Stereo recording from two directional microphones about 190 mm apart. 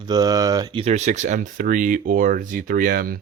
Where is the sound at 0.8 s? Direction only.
40° right (ahead or behind).